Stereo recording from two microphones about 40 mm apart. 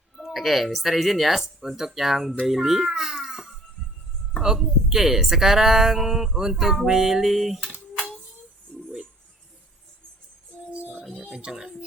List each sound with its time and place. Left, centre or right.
0.2 s a child's voice: centre
10.7 s music: right
11.3 s speech: centre